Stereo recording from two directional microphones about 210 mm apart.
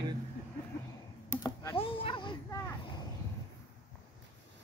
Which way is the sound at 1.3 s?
15° left (ahead or behind).